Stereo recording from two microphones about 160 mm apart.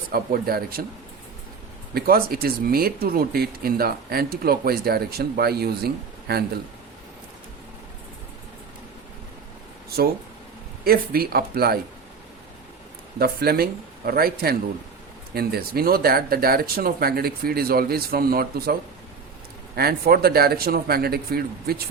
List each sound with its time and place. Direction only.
0.1 s speech: 65° right (ahead or behind)
1.9 s speech: 70° right (ahead or behind)
10.8 s speech: 70° right (ahead or behind)
13.1 s speech: 75° right (ahead or behind)